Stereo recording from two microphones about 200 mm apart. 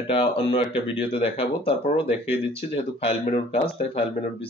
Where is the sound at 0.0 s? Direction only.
25° left (ahead or behind).